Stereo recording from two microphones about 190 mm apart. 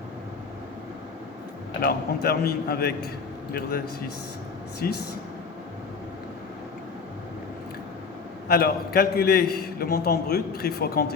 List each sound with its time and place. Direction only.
1.8 s a man's voice: 55° left (ahead or behind)
4.8 s speech: 50° left (ahead or behind)
8.4 s a man's voice: 55° left (ahead or behind)